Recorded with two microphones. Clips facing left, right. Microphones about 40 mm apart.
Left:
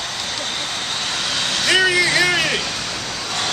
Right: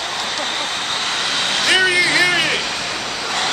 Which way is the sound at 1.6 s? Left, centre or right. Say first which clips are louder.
Right 1 dB; centre.